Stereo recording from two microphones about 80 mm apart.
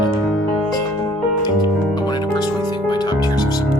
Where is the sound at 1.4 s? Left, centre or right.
Left.